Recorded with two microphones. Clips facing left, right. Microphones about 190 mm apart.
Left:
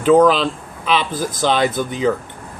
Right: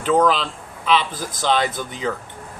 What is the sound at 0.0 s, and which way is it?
Speech, 15° left (ahead or behind).